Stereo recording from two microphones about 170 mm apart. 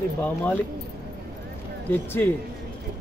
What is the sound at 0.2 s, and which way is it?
Speech, 10° left (ahead or behind).